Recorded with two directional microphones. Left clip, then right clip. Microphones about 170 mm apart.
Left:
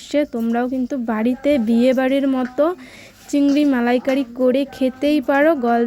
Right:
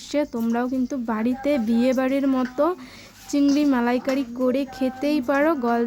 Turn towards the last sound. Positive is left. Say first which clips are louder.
# left 5 dB
turn(degrees=15)  # may be behind; listen again after turning